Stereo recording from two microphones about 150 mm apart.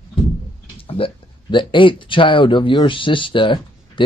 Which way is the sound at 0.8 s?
35° left (ahead or behind).